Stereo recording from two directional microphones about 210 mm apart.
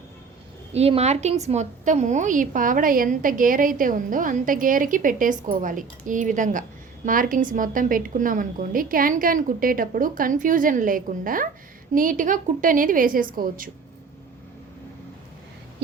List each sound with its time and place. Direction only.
0.7 s a woman's voice: 30° right (ahead or behind)